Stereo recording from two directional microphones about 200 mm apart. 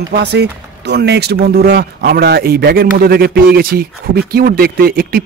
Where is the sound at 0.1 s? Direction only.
60° right (ahead or behind).